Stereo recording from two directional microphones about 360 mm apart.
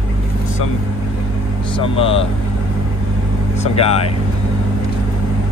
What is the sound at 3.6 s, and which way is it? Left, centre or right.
Speech, centre.